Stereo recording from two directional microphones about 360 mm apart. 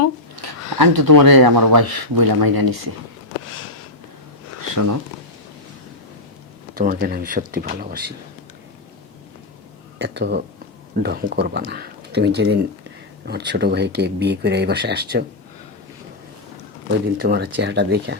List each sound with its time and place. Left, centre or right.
0.4 s speech: right
4.7 s speech: right
6.7 s speech: right
10.0 s speech: right
17.2 s speech: right